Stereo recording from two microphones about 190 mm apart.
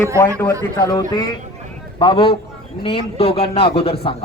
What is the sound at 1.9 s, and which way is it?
A man's voice, 25° left (ahead or behind).